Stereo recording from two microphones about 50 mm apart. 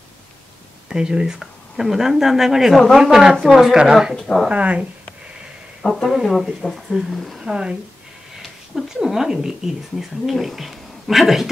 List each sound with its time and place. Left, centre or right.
0.9 s speech: centre
3.7 s speech: centre
4.2 s speech: centre
4.5 s speech: right
5.8 s speech: centre
7.3 s speech: centre